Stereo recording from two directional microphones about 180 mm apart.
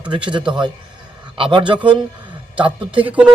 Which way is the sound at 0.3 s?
25° right (ahead or behind).